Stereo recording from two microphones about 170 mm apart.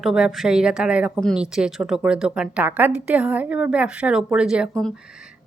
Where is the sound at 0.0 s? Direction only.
Centre (ahead or behind).